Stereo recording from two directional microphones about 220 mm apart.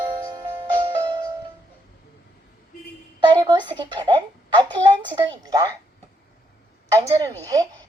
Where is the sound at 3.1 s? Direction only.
20° right (ahead or behind).